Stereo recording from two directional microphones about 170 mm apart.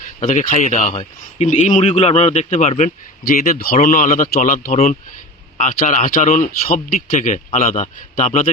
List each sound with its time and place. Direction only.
0.2 s speech: 45° left (ahead or behind)